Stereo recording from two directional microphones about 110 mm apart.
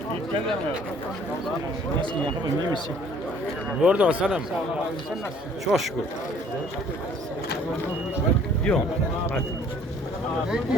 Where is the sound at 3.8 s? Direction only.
10° right (ahead or behind).